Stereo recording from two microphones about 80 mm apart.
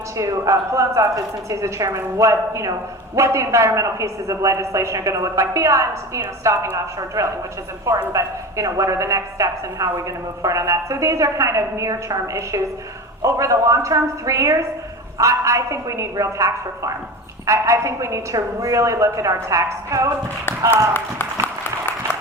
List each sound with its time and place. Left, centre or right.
0.2 s a woman's voice: right